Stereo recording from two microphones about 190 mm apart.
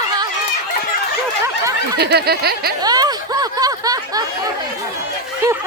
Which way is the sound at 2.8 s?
20° right (ahead or behind).